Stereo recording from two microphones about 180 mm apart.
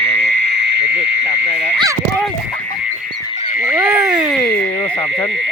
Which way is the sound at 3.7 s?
10° right (ahead or behind).